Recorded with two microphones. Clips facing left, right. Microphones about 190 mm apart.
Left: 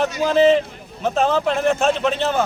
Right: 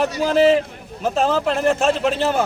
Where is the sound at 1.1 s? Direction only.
5° right (ahead or behind).